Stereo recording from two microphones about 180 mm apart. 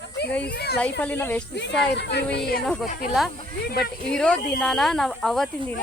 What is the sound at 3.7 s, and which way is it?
Speech, 60° left (ahead or behind).